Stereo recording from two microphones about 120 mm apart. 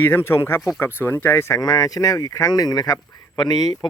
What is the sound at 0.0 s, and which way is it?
Speech, 20° left (ahead or behind).